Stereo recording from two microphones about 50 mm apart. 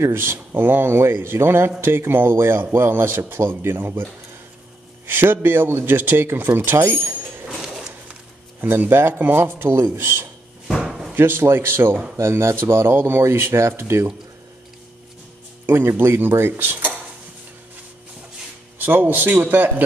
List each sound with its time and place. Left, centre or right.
0.0 s a man's voice: right
5.9 s a man's voice: right
7.4 s a sound: centre
8.5 s a man's voice: right
10.8 s slam: centre
11.1 s a man's voice: right
15.6 s speech: right
18.8 s speech: right